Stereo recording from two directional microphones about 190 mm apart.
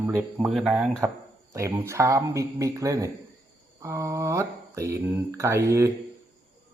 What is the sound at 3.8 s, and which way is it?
Mantra, 15° right (ahead or behind).